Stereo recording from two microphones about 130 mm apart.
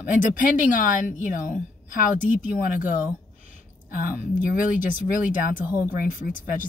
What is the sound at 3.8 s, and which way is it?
Speech, 90° left.